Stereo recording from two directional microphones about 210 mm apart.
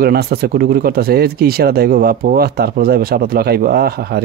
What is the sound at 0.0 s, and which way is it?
Speech, 50° right (ahead or behind).